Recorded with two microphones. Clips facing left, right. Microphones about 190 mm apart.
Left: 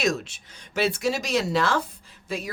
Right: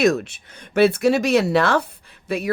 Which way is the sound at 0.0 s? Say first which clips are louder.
Right 8 dB; 60° right (ahead or behind).